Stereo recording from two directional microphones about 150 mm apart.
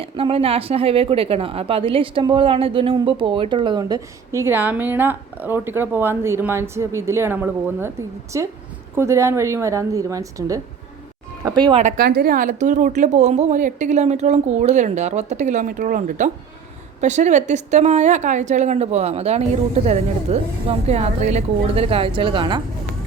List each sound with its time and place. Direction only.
0.0 s a woman's voice: 40° right (ahead or behind)
11.9 s a woman's voice: 90° right; by 22.6 s 35° right (ahead or behind)